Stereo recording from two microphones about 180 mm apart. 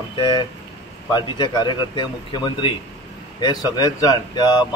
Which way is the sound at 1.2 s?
25° left (ahead or behind).